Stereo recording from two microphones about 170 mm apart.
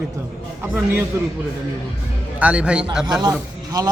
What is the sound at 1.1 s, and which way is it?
Speech, 15° right (ahead or behind).